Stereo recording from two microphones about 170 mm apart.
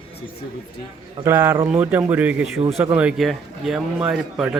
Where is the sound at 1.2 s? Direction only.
20° right (ahead or behind).